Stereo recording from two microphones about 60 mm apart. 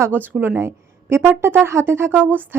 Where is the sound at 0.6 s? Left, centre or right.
Right.